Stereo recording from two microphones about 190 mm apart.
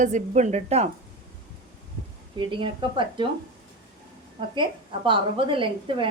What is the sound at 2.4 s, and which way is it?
Speech, 25° right (ahead or behind).